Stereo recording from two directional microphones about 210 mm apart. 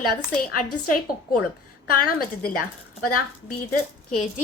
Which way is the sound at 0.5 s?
45° left (ahead or behind).